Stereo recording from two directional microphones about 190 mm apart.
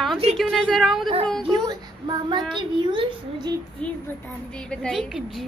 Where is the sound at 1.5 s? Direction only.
20° right (ahead or behind).